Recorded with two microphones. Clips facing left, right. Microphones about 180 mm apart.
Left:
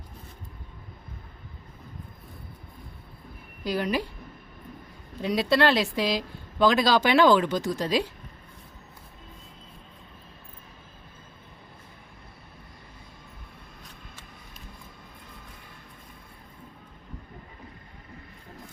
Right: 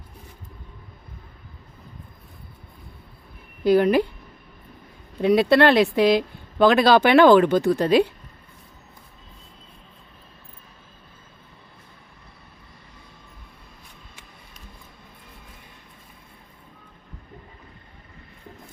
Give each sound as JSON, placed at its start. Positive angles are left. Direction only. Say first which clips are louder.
{"t": 3.6, "sound": "speech", "louder": "right 10 dB", "side_deg": -55}
{"t": 5.2, "sound": "speech", "louder": "right 7 dB", "side_deg": -60}